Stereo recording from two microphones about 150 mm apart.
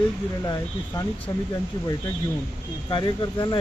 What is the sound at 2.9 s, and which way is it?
Speech, 30° left (ahead or behind).